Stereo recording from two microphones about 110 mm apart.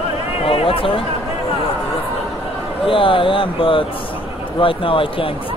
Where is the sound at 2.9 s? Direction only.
50° left (ahead or behind).